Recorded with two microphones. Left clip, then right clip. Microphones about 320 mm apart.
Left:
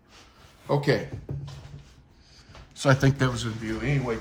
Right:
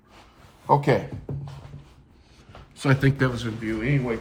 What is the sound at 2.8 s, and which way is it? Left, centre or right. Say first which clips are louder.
Speech: even; centre.